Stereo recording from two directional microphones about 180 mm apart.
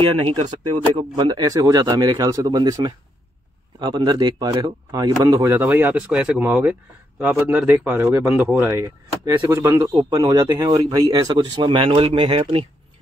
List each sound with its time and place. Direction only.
0.7 s speech: 25° right (ahead or behind)